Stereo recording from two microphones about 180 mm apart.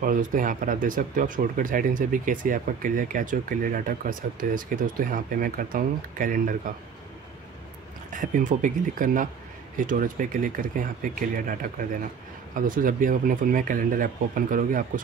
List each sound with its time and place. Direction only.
0.0 s speech: 50° right (ahead or behind)
8.1 s speech: 45° right (ahead or behind)